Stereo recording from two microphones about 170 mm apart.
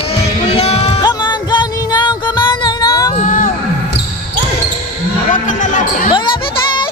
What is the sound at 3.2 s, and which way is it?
Music, 45° left (ahead or behind).